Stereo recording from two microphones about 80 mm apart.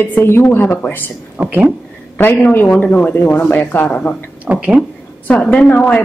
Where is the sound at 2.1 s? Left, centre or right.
Left.